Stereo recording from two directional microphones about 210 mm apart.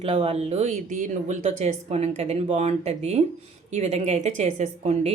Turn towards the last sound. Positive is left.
turn(degrees=-30)  # may be behind; listen again after turning